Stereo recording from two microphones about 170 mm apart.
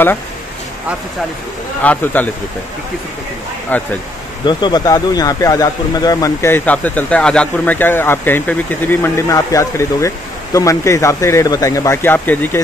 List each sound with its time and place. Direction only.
1.8 s speech: 10° left (ahead or behind)
3.7 s speech: 10° left (ahead or behind)
4.5 s speech: 25° left (ahead or behind); by 12.4 s 10° left (ahead or behind)